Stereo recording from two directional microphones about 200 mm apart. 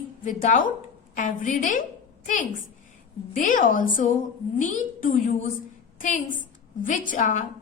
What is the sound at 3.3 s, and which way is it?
A woman's voice, 40° left (ahead or behind).